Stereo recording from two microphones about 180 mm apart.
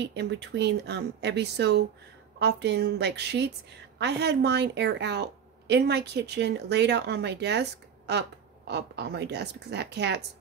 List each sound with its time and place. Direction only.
0.0 s a woman's voice: 70° right (ahead or behind)